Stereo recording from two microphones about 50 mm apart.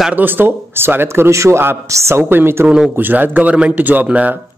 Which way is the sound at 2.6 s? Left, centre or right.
Centre.